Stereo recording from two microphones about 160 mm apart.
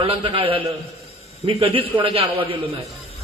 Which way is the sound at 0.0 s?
35° right (ahead or behind).